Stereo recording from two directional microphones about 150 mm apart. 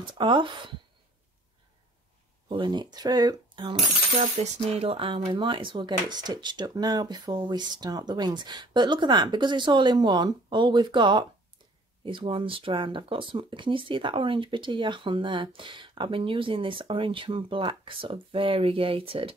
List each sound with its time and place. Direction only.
0.0 s speech: 30° right (ahead or behind)
2.5 s speech: 30° right (ahead or behind)